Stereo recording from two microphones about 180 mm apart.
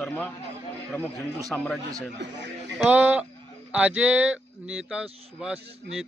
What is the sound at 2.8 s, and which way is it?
Speech, 10° right (ahead or behind).